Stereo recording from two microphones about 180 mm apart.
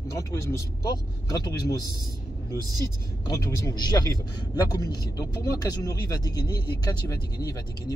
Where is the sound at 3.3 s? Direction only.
20° left (ahead or behind).